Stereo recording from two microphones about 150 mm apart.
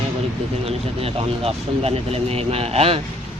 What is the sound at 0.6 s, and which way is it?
Speech, 40° right (ahead or behind).